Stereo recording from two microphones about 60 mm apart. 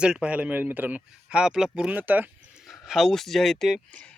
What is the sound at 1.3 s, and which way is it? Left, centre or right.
Speech, centre.